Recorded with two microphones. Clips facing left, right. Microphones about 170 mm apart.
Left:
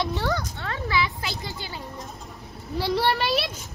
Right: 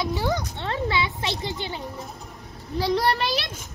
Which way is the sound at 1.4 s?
25° right (ahead or behind).